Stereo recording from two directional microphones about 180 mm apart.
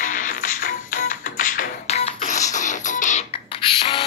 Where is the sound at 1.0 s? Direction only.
50° left (ahead or behind).